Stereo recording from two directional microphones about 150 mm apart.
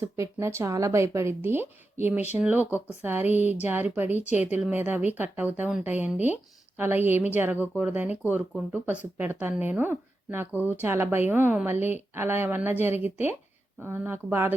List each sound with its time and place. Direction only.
0.0 s a woman's voice: 20° right (ahead or behind)
4.3 s speech: 50° left (ahead or behind)
4.6 s a woman's voice: 10° right (ahead or behind)